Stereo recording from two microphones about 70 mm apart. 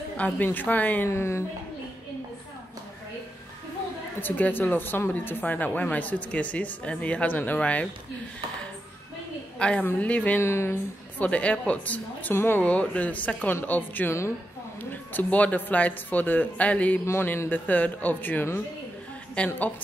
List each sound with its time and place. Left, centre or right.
0.2 s speech: left
1.0 s a woman's voice: left
4.2 s speech: left
9.6 s a woman's voice: centre
10.4 s a woman's voice: left
11.1 s speech: centre
12.6 s speech: centre
17.0 s speech: left
19.3 s speech: centre